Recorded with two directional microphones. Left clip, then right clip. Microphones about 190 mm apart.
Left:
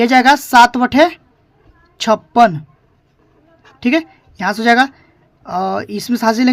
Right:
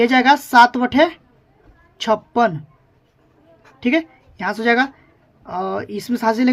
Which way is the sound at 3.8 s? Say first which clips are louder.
Left 3 dB; 35° left (ahead or behind).